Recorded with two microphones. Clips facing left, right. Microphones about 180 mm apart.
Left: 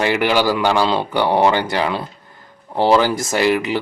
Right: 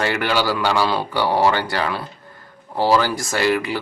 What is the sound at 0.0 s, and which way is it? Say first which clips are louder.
Speech: left 4 dB; 15° left (ahead or behind).